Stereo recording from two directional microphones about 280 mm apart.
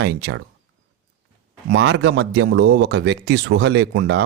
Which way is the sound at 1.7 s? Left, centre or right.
Right.